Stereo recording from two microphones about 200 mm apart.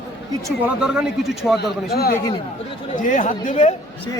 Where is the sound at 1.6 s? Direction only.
50° left (ahead or behind).